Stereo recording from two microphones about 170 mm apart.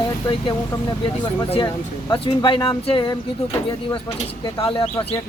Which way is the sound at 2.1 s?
25° left (ahead or behind).